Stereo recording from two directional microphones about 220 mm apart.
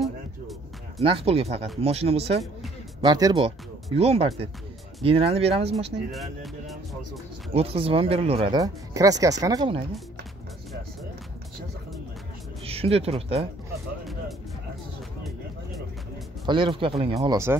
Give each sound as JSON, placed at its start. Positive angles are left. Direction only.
{"t": 0.0, "sound": "music", "side_deg": 0}
{"t": 1.0, "sound": "speech", "side_deg": -25}
{"t": 3.0, "sound": "speech", "side_deg": -15}
{"t": 6.1, "sound": "music", "side_deg": 0}
{"t": 7.5, "sound": "speech", "side_deg": -25}
{"t": 12.6, "sound": "speech", "side_deg": -25}
{"t": 16.4, "sound": "speech", "side_deg": -20}